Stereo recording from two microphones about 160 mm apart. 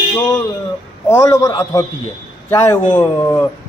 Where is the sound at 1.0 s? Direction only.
20° left (ahead or behind).